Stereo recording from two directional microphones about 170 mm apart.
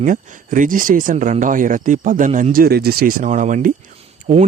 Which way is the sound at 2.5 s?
65° right (ahead or behind).